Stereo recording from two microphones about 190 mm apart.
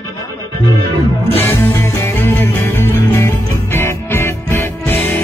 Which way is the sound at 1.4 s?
15° left (ahead or behind).